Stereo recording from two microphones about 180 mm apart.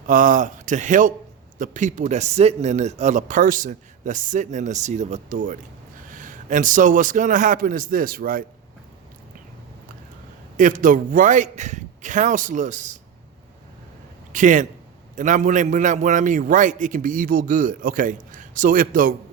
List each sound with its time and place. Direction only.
0.1 s speech: 50° right (ahead or behind)
10.6 s speech: 45° right (ahead or behind)
14.3 s speech: 45° right (ahead or behind)